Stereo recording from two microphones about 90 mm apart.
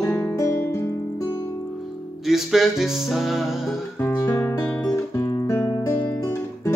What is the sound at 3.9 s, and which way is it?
Guitar, 25° left (ahead or behind).